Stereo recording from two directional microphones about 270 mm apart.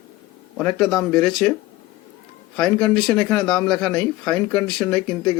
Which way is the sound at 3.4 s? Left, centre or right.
Centre.